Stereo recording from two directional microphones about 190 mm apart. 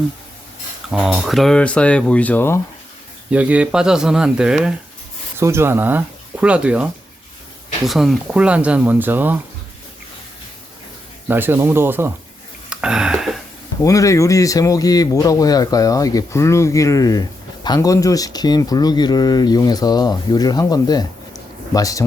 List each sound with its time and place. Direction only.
0.9 s speech: 5° right (ahead or behind)
3.3 s speech: 5° right (ahead or behind)
7.9 s speech: centre (ahead or behind)
11.3 s speech: 10° right (ahead or behind)
12.7 s a sound: 5° right (ahead or behind)
13.8 s a man's voice: 15° left (ahead or behind)